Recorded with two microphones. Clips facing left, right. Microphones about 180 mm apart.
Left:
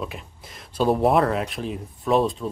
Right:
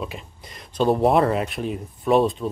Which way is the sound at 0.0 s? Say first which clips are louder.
Right 1 dB; centre (ahead or behind).